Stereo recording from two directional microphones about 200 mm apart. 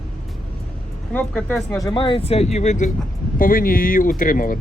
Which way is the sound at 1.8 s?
20° left (ahead or behind).